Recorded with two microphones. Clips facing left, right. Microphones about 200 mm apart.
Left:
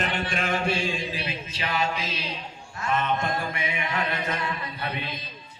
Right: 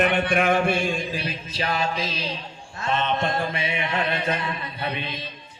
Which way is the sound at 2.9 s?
25° right (ahead or behind).